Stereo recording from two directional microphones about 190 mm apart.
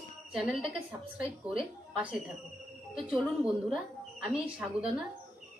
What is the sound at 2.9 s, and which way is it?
A woman's voice, centre (ahead or behind).